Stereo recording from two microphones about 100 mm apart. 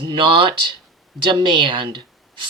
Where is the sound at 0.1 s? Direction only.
55° right (ahead or behind).